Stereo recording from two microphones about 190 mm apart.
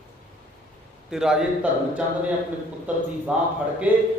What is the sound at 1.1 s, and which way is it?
Speech, 5° right (ahead or behind).